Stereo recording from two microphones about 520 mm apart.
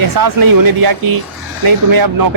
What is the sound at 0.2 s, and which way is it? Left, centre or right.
A man's voice, right.